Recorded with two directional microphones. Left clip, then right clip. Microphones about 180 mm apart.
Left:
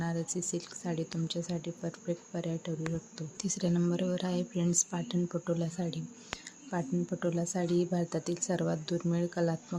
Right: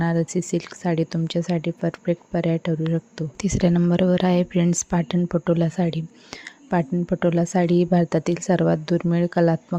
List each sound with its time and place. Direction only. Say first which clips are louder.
0.0 s speech: right 12 dB; 50° right (ahead or behind)